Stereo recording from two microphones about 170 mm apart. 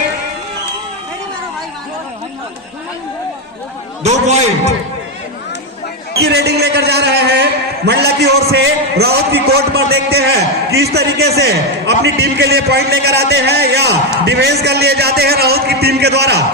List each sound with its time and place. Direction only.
4.0 s a man's voice: 40° right (ahead or behind)
6.2 s a man's voice: 75° right (ahead or behind)